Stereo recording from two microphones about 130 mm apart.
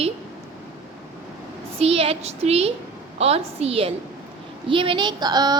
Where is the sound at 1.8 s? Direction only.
50° right (ahead or behind).